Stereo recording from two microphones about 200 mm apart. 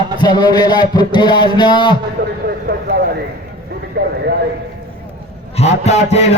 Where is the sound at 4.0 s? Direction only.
55° right (ahead or behind).